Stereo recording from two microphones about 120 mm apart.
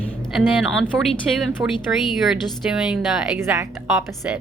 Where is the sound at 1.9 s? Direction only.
10° right (ahead or behind).